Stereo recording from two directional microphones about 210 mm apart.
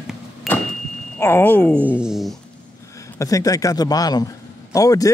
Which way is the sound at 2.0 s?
Centre (ahead or behind).